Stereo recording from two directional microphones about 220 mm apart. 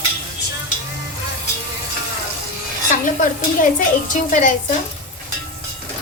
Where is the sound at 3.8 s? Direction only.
35° left (ahead or behind).